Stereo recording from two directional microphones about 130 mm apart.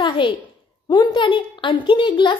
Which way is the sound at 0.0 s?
40° left (ahead or behind).